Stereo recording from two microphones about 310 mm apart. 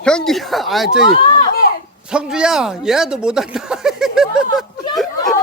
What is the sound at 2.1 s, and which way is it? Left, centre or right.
Speech, centre.